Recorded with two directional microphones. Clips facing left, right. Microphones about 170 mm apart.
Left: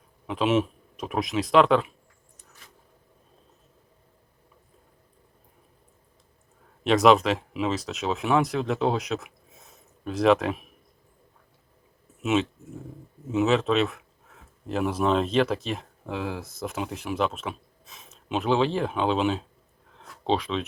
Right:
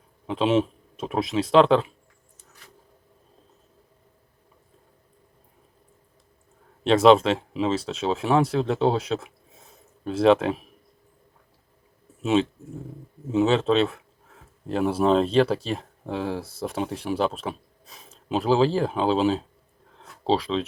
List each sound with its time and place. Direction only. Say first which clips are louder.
0.3 s speech: right 2 dB; 30° right (ahead or behind)
6.8 s speech: right 3 dB; 30° right (ahead or behind)
12.2 s speech: right 3 dB; 30° right (ahead or behind)